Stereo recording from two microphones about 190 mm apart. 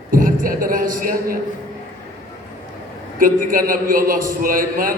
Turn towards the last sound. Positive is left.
turn(degrees=-45)  # may be behind; listen again after turning